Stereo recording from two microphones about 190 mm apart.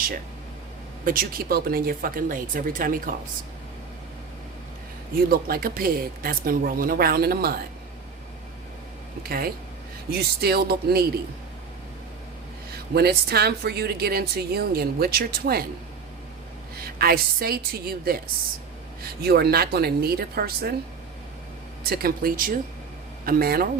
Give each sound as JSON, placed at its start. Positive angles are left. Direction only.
{"t": 1.0, "sound": "speech", "side_deg": -50}
{"t": 5.3, "sound": "speech", "side_deg": -50}
{"t": 9.2, "sound": "speech", "side_deg": -55}
{"t": 12.9, "sound": "speech", "side_deg": -55}
{"t": 16.8, "sound": "speech", "side_deg": -55}
{"t": 21.8, "sound": "speech", "side_deg": -55}